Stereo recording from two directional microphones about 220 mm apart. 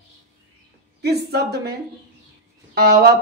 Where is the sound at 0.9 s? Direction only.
45° right (ahead or behind).